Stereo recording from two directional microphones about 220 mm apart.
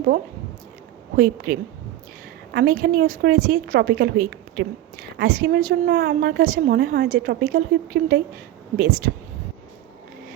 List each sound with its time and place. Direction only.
1.1 s a woman's voice: 45° right (ahead or behind)